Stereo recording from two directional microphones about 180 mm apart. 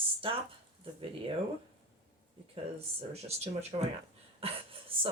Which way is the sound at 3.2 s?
35° right (ahead or behind).